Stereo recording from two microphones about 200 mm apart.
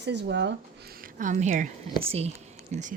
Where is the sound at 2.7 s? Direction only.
35° right (ahead or behind).